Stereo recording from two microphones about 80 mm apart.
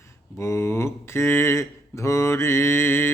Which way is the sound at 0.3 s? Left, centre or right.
Left.